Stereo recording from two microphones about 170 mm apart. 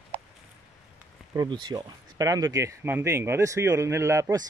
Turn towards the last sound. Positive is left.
turn(degrees=-20)  # may be behind; listen again after turning